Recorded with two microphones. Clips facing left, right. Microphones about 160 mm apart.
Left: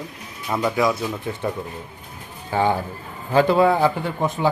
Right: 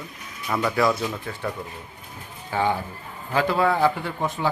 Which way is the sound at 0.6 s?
10° left (ahead or behind).